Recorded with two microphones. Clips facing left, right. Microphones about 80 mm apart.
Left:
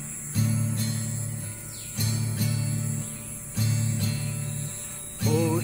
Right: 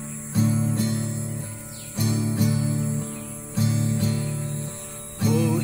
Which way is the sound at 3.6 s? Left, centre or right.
Right.